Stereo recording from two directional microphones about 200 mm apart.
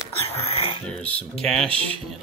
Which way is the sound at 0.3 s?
30° left (ahead or behind).